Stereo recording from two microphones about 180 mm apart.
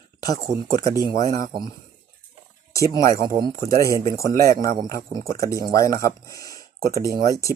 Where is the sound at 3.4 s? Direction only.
55° right (ahead or behind).